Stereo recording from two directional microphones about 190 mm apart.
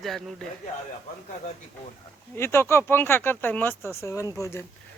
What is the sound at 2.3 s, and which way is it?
Speech, 15° left (ahead or behind).